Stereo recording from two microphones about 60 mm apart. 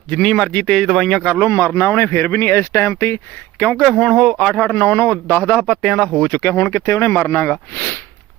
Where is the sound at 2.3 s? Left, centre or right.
Left.